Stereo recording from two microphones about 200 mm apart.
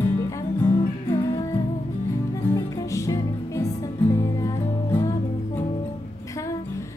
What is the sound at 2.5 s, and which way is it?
Music, 15° left (ahead or behind).